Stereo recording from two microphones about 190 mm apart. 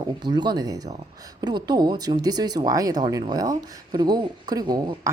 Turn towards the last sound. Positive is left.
turn(degrees=-20)  # may be behind; listen again after turning